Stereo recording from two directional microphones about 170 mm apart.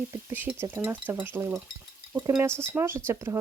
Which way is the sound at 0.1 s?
15° right (ahead or behind).